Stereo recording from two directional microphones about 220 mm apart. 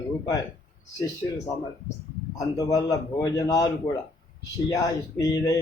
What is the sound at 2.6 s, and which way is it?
Speech, 15° left (ahead or behind).